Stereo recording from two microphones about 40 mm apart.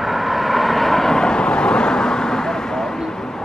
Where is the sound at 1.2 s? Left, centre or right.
Left.